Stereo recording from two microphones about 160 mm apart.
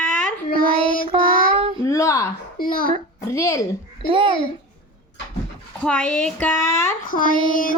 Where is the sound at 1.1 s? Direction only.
35° right (ahead or behind).